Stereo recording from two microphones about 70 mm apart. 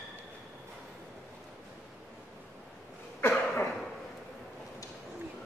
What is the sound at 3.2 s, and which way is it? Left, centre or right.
Cough, left.